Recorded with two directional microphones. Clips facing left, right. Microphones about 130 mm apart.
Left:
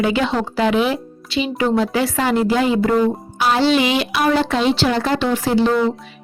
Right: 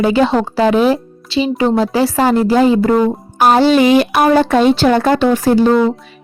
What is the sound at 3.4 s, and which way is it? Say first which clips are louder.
Speech: right 6 dB; 45° right (ahead or behind).